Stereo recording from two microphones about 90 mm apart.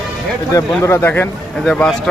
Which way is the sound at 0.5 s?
35° left (ahead or behind).